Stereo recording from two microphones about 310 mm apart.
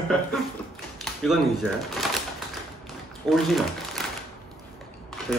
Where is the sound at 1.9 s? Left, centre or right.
Centre.